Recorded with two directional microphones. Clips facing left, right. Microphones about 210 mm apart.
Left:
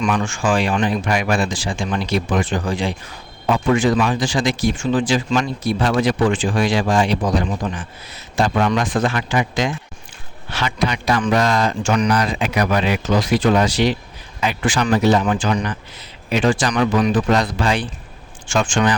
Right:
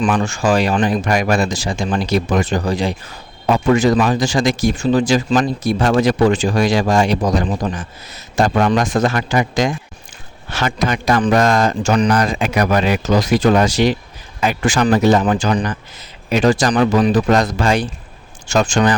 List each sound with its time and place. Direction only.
0.0 s speech: 35° right (ahead or behind)